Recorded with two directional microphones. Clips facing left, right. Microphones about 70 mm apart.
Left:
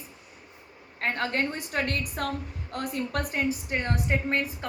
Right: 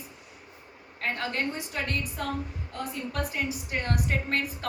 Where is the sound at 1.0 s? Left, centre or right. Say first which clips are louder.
Left 2 dB; left.